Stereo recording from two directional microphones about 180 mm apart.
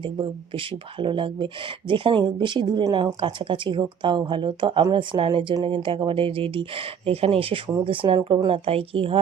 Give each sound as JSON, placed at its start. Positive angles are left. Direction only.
{"t": 0.0, "sound": "speech", "side_deg": -25}